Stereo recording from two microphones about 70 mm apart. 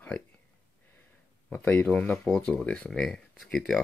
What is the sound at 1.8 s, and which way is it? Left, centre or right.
Speech, centre.